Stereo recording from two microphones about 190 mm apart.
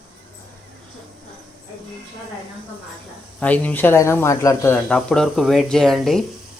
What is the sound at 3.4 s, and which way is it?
Speech, 10° left (ahead or behind).